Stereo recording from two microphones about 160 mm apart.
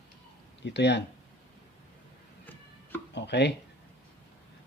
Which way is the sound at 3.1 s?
90° left.